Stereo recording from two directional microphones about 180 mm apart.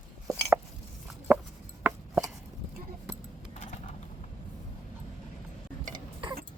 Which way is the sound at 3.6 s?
40° left (ahead or behind).